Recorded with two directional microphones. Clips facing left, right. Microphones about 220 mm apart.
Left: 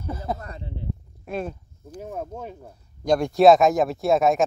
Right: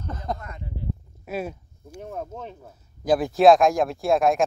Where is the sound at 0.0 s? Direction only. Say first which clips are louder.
Left 2 dB; 10° left (ahead or behind).